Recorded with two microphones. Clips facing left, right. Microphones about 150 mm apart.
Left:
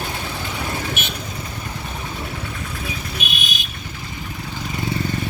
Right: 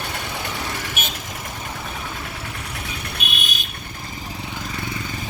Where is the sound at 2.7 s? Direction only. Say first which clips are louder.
Left 3 dB; 65° right (ahead or behind).